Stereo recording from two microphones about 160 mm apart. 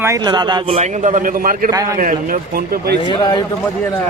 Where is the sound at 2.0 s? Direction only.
60° right (ahead or behind).